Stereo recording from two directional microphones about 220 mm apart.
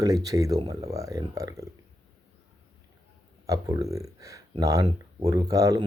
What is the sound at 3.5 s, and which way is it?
Speech, 15° right (ahead or behind).